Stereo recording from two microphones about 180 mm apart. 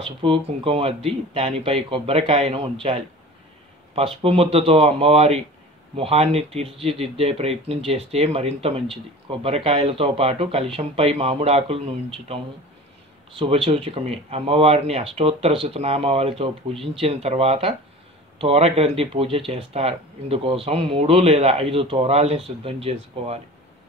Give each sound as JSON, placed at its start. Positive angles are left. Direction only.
{"t": 0.2, "sound": "speech", "side_deg": -30}
{"t": 13.4, "sound": "speech", "side_deg": -30}